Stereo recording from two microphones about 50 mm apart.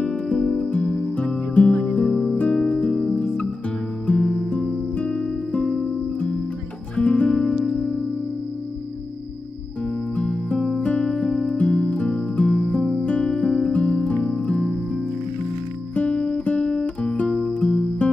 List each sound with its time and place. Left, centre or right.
0.0 s music: left
0.7 s music: left
7.0 s music: left
7.3 s music: centre
10.1 s music: left
17.6 s music: left